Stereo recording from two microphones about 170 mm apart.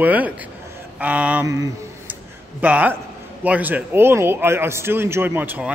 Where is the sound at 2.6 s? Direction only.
10° right (ahead or behind).